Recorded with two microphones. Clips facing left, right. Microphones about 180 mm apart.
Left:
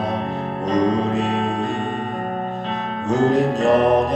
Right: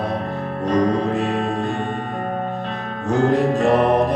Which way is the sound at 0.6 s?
60° right (ahead or behind).